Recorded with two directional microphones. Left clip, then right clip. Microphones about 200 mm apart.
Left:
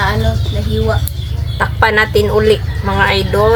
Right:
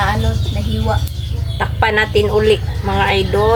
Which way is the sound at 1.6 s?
5° left (ahead or behind).